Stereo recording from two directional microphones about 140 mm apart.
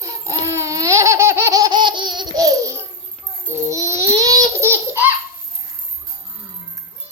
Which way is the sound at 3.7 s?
20° right (ahead or behind).